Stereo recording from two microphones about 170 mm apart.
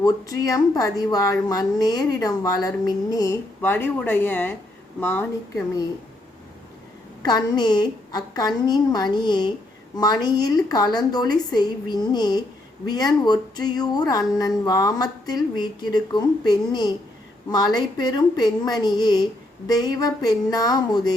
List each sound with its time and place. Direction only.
0.0 s a woman's voice: 20° left (ahead or behind)
7.2 s a woman's voice: 25° left (ahead or behind)